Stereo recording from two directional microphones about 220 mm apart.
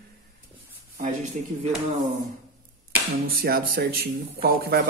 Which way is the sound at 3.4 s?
45° right (ahead or behind).